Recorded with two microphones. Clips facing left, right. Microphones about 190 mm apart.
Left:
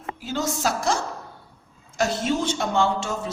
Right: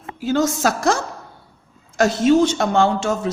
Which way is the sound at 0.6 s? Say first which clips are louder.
Right 5 dB; 90° right.